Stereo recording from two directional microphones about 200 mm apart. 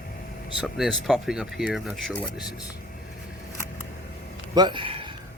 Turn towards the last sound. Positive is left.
turn(degrees=-25)  # may be behind; listen again after turning